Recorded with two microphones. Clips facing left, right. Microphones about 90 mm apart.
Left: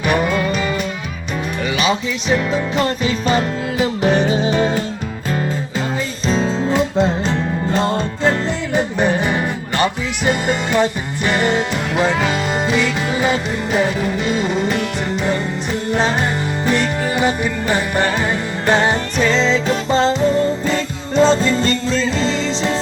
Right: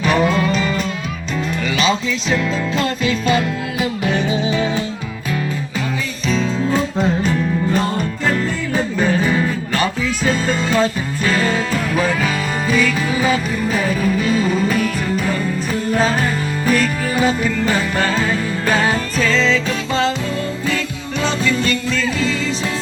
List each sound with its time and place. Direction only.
0.0 s music: 10° left (ahead or behind)
1.8 s music: 15° left (ahead or behind)
3.1 s music: 35° left (ahead or behind)
6.2 s music: 35° left (ahead or behind)
16.6 s music: 20° left (ahead or behind)